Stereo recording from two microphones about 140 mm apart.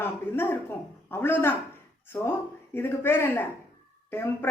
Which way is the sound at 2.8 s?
15° left (ahead or behind).